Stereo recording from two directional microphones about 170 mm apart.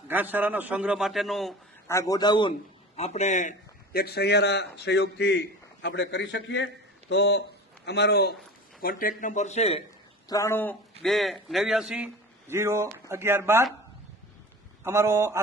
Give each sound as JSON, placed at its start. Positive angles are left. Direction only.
{"t": 0.1, "sound": "a man's voice", "side_deg": -10}
{"t": 1.9, "sound": "a man's voice", "side_deg": 20}
{"t": 2.9, "sound": "speech", "side_deg": 40}
{"t": 3.9, "sound": "a man's voice", "side_deg": 70}
{"t": 7.1, "sound": "a man's voice", "side_deg": 80}
{"t": 8.8, "sound": "speech", "side_deg": 55}
{"t": 10.2, "sound": "a man's voice", "side_deg": 20}
{"t": 14.8, "sound": "a man's voice", "side_deg": -15}